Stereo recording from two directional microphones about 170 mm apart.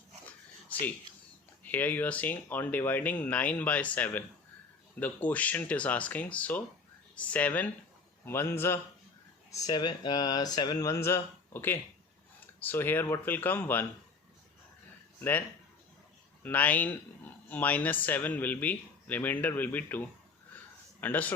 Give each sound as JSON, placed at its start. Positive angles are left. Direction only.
{"t": 0.3, "sound": "dog", "side_deg": 10}
{"t": 1.6, "sound": "speech", "side_deg": 10}
{"t": 15.2, "sound": "speech", "side_deg": 10}